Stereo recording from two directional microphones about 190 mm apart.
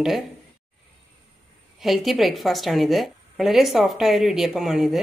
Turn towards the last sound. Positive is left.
turn(degrees=0)  # may be behind; listen again after turning